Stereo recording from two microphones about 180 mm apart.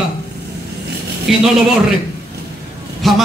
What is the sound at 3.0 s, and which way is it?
Speech, centre (ahead or behind).